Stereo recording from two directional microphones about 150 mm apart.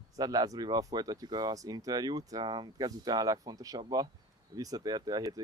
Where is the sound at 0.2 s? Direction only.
25° right (ahead or behind).